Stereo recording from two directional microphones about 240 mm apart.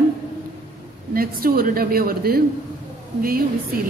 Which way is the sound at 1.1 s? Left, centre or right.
Right.